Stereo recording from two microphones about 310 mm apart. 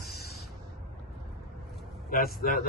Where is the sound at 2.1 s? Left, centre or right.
Left.